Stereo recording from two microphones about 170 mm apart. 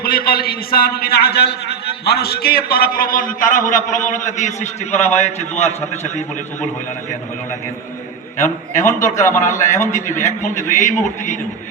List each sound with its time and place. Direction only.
0.0 s a man's voice: 60° left (ahead or behind); by 6.7 s 40° left (ahead or behind)
8.7 s a man's voice: 45° left (ahead or behind)